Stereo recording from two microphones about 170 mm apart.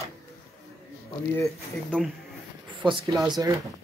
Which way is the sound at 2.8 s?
25° right (ahead or behind).